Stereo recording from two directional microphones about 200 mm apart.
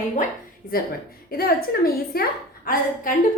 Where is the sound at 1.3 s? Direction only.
50° left (ahead or behind).